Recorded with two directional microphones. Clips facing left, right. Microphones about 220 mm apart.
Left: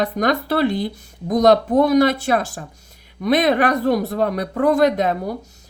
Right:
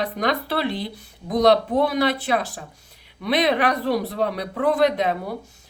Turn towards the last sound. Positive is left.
turn(degrees=45)  # may be behind; listen again after turning